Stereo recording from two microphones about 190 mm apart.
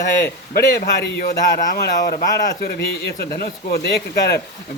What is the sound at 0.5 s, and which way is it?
Speech, 55° left (ahead or behind).